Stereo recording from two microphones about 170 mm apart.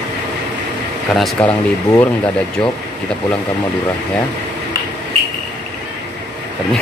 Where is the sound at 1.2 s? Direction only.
Centre (ahead or behind).